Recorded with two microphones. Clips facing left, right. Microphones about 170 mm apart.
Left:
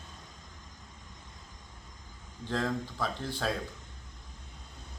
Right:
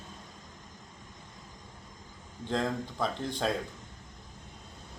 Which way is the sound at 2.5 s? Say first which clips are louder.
Right 1 dB; 20° right (ahead or behind).